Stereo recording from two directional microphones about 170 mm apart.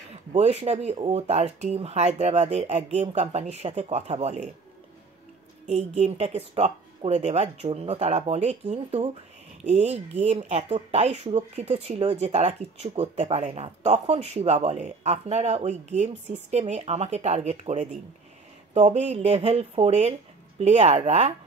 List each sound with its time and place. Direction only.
0.3 s speech: 40° right (ahead or behind)
5.7 s speech: 40° right (ahead or behind)